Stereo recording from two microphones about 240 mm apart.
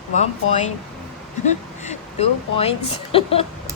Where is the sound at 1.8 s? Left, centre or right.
Left.